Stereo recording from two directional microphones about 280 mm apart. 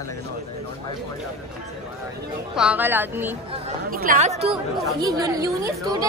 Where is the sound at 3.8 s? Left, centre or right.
Right.